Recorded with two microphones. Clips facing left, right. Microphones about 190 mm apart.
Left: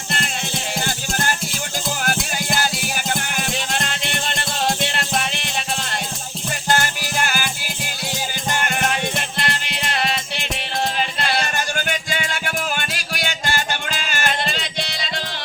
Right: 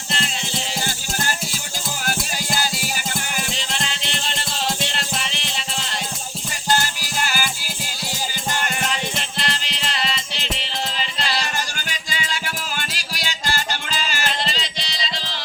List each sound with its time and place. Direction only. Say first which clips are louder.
0.1 s music: left 1 dB; 55° left (ahead or behind)
3.1 s music: left 3 dB; 55° left (ahead or behind)